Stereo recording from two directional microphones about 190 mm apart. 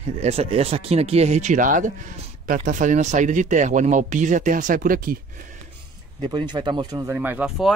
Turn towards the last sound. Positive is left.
turn(degrees=0)  # may be behind; listen again after turning